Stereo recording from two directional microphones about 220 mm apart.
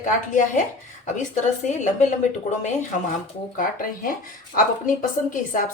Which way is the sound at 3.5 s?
40° left (ahead or behind).